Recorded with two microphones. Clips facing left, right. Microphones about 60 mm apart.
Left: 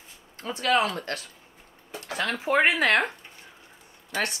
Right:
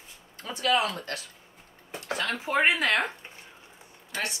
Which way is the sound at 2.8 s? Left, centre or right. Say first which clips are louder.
Left 3 dB; left.